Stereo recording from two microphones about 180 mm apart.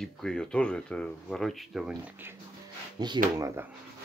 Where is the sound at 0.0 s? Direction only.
5° left (ahead or behind).